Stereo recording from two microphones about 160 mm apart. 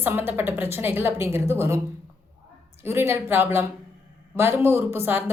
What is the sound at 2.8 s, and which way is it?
A woman's voice, 15° right (ahead or behind).